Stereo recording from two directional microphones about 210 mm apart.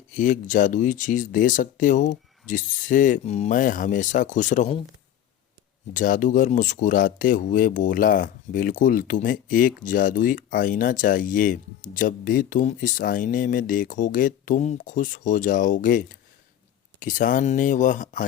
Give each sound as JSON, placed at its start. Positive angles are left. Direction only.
{"t": 0.1, "sound": "speech", "side_deg": 35}
{"t": 5.9, "sound": "speech", "side_deg": 40}